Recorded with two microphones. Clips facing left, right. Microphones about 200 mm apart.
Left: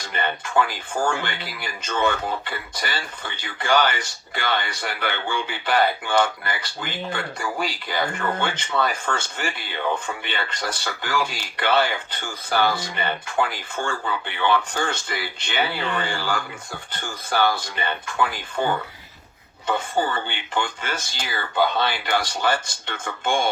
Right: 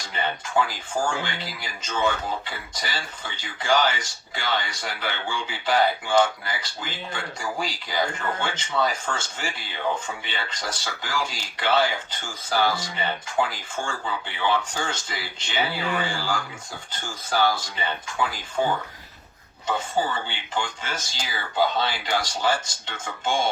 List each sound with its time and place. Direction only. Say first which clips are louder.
0.0 s speech: left 2 dB; 60° left (ahead or behind)